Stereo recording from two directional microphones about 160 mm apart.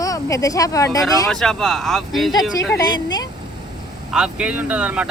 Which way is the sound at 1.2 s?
5° left (ahead or behind).